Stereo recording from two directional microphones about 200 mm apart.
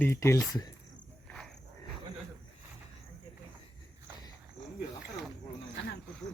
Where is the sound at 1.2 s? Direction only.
5° left (ahead or behind).